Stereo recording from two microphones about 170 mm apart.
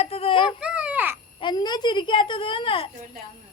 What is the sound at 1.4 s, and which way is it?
A woman's voice, 25° left (ahead or behind).